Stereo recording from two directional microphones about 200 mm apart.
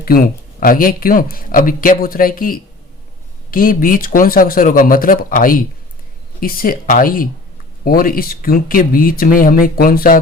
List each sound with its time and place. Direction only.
0.6 s speech: 45° left (ahead or behind)